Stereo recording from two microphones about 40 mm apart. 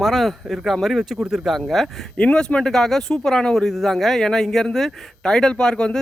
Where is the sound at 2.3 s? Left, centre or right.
Centre.